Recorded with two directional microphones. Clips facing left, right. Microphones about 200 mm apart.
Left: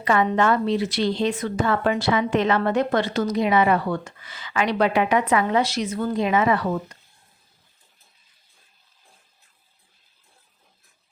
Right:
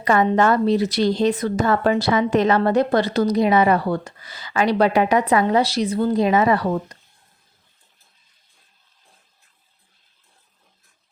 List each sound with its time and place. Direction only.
0.0 s a woman's voice: 40° right (ahead or behind)